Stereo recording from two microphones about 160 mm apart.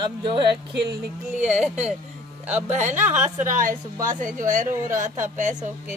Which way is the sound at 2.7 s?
50° right (ahead or behind).